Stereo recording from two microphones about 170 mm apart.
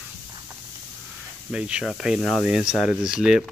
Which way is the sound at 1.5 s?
5° right (ahead or behind).